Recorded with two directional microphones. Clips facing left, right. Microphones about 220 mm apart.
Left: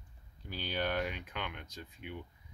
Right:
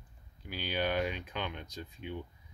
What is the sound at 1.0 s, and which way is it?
Speech, 25° right (ahead or behind).